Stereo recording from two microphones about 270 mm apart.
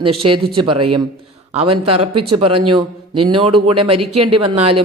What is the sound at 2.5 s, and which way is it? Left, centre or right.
Speech, right.